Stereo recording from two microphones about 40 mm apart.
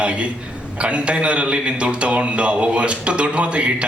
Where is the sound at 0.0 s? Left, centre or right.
Right.